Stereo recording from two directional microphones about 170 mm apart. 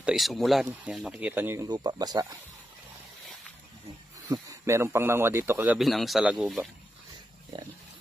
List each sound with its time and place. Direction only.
0.0 s speech: centre (ahead or behind); by 2.3 s 20° right (ahead or behind)
4.3 s speech: 15° right (ahead or behind)
5.8 s speech: centre (ahead or behind)
7.5 s pig: 30° right (ahead or behind)